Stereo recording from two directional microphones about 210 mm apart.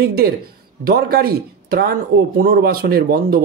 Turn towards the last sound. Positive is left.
turn(degrees=-45)  # may be behind; listen again after turning